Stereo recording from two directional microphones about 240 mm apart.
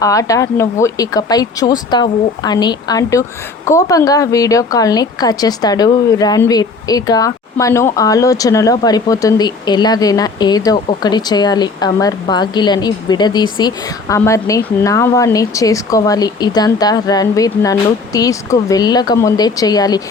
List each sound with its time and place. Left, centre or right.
0.0 s speech: centre